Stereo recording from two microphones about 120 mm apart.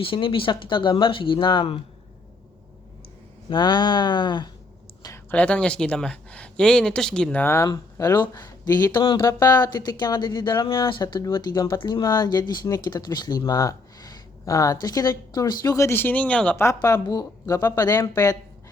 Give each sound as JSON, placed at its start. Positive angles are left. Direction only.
{"t": 0.0, "sound": "speech", "side_deg": 45}
{"t": 3.5, "sound": "speech", "side_deg": 40}
{"t": 5.3, "sound": "speech", "side_deg": 10}
{"t": 7.4, "sound": "speech", "side_deg": 25}
{"t": 16.6, "sound": "speech", "side_deg": 25}